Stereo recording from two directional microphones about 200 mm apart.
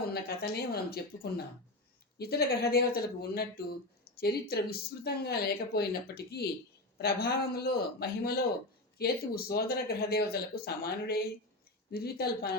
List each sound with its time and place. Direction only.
0.1 s speech: 50° left (ahead or behind)